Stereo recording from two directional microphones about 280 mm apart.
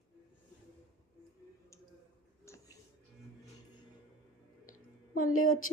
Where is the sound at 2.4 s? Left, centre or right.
Centre.